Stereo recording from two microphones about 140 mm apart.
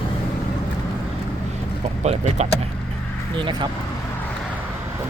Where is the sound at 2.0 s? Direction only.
50° right (ahead or behind).